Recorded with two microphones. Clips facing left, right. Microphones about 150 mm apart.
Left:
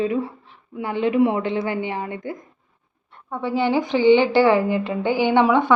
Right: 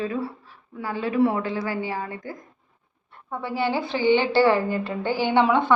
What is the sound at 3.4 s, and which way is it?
A woman's voice, 20° left (ahead or behind).